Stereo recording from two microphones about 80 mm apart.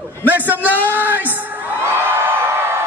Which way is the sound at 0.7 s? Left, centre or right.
Left.